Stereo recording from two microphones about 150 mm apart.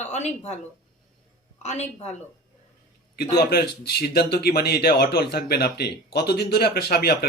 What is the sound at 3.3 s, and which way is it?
Speech, 90° left.